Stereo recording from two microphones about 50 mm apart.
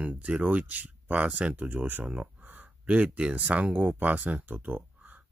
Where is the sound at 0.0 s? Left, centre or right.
Right.